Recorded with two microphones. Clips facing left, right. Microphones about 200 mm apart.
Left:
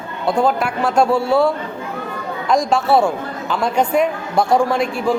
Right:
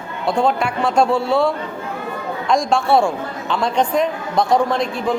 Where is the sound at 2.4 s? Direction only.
5° left (ahead or behind).